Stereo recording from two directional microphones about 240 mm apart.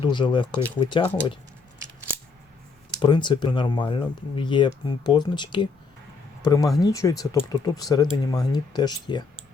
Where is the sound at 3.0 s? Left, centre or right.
Centre.